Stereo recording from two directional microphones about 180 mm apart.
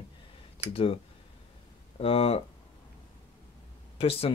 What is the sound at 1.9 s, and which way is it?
Speech, 35° left (ahead or behind).